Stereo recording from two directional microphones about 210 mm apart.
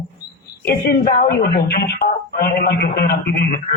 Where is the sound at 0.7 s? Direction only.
50° left (ahead or behind).